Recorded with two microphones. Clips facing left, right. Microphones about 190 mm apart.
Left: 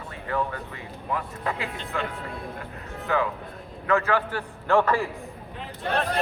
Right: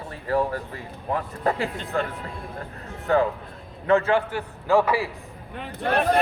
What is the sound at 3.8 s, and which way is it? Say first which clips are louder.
Speech: right 4 dB; 30° right (ahead or behind).